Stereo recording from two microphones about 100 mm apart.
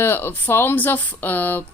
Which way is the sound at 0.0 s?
25° left (ahead or behind).